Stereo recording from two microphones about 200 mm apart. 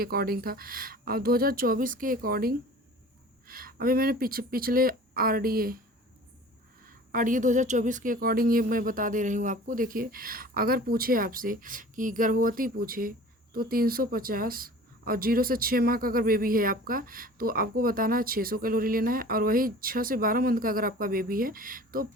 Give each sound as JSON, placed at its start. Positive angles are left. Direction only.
{"t": 0.0, "sound": "a woman's voice", "side_deg": -50}
{"t": 6.8, "sound": "a woman's voice", "side_deg": -45}